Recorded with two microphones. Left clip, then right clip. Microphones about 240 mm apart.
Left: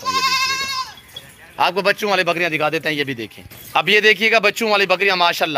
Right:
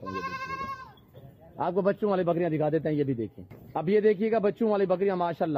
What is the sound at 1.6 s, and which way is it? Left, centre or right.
Speech, centre.